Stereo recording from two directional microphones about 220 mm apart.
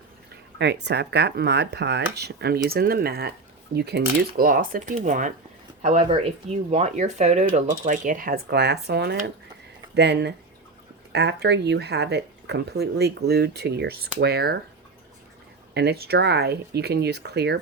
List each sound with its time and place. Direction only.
0.6 s speech: 50° right (ahead or behind)
15.7 s speech: 50° right (ahead or behind)